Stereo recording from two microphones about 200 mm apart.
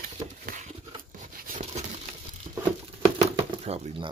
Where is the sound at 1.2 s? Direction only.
45° right (ahead or behind).